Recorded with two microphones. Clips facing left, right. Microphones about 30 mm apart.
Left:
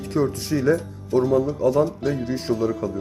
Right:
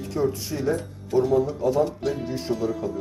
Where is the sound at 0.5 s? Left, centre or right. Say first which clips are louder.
Left 6 dB; left.